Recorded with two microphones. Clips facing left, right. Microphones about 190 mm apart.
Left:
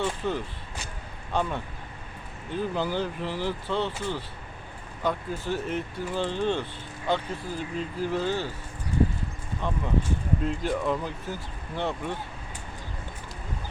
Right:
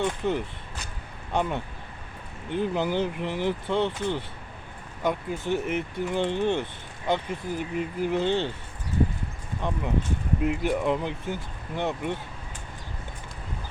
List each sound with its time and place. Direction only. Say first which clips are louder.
0.2 s speech: right 3 dB; 15° right (ahead or behind)
9.6 s speech: even; 15° right (ahead or behind)